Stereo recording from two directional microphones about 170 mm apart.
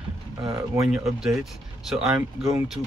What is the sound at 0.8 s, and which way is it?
Speech, 5° right (ahead or behind).